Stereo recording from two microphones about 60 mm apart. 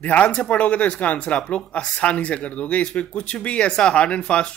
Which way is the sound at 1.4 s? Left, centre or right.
Centre.